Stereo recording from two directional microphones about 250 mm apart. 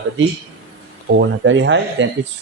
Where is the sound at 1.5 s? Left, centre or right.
Right.